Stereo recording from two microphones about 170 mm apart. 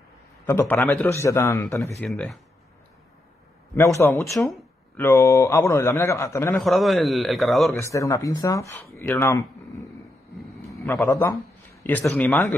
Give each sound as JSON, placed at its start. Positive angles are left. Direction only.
{"t": 0.5, "sound": "a man's voice", "side_deg": 15}
{"t": 1.0, "sound": "a man's voice", "side_deg": 15}
{"t": 2.0, "sound": "a man's voice", "side_deg": 5}
{"t": 3.7, "sound": "a man's voice", "side_deg": 15}
{"t": 6.5, "sound": "a man's voice", "side_deg": 0}
{"t": 7.7, "sound": "a man's voice", "side_deg": 15}